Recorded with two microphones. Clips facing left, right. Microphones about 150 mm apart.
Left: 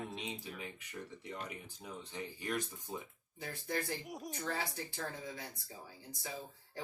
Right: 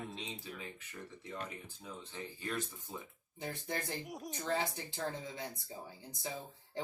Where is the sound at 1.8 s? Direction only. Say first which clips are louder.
Left 2 dB; 15° left (ahead or behind).